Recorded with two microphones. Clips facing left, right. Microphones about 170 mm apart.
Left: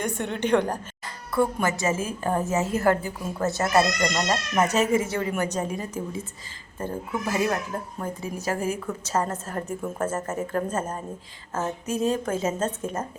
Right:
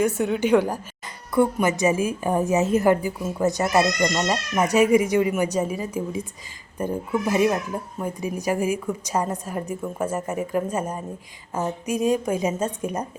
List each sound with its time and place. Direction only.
0.0 s a woman's voice: 5° right (ahead or behind)
1.0 s music: 20° right (ahead or behind)
1.6 s a woman's voice: 15° right (ahead or behind)